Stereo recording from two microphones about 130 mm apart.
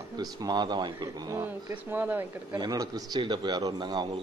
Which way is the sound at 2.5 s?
30° right (ahead or behind).